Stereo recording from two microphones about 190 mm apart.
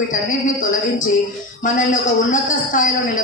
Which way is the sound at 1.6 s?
40° left (ahead or behind).